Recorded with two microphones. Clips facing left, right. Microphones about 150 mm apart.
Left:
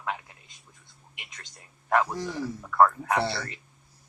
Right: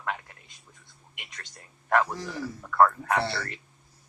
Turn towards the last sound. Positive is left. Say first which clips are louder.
# left 1 dB
turn(degrees=15)  # may be behind; listen again after turning